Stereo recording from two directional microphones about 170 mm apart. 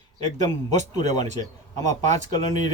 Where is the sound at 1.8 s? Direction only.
45° right (ahead or behind).